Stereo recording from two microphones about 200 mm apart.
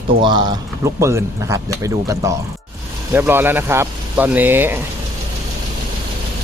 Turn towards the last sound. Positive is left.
turn(degrees=-10)  # may be behind; listen again after turning